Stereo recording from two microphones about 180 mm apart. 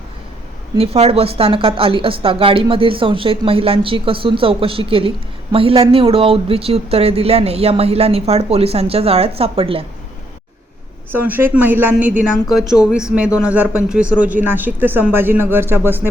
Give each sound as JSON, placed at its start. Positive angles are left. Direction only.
{"t": 0.8, "sound": "speech", "side_deg": -35}
{"t": 11.1, "sound": "speech", "side_deg": -10}